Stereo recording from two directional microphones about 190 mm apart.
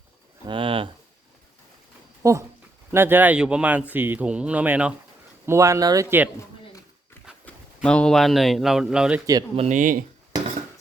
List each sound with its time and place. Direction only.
0.4 s speech: 25° right (ahead or behind)
2.2 s speech: 15° right (ahead or behind)
7.9 s speech: 5° left (ahead or behind)
9.6 s speech: 40° right (ahead or behind)